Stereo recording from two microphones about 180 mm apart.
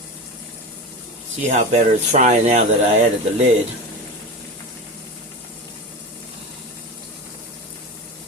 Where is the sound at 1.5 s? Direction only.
40° right (ahead or behind).